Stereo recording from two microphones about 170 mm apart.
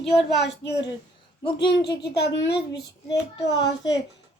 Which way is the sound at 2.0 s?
90° left.